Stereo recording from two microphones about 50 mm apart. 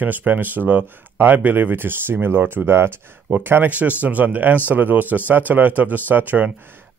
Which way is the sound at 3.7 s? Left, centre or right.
Right.